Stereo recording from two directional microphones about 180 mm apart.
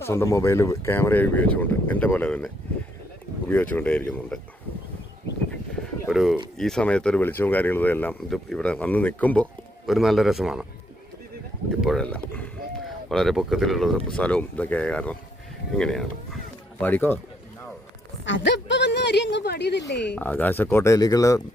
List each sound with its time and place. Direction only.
0.0 s speech: 15° left (ahead or behind)
3.5 s speech: 10° left (ahead or behind)
6.1 s speech: centre (ahead or behind)
11.8 s speech: centre (ahead or behind)
18.3 s a sound: 85° left; by 19.8 s 70° left (ahead or behind)
19.9 s speech: 70° left (ahead or behind)
20.1 s speech: 10° left (ahead or behind)